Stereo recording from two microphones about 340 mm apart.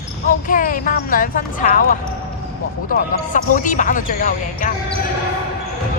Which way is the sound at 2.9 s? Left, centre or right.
Left.